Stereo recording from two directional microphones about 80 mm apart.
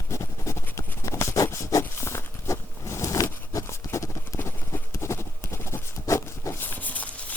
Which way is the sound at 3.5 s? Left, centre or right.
Left.